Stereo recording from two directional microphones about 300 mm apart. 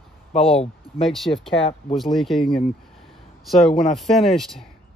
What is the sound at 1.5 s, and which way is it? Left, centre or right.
Speech, centre.